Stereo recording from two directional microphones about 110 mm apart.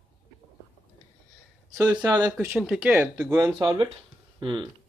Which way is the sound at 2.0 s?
30° right (ahead or behind).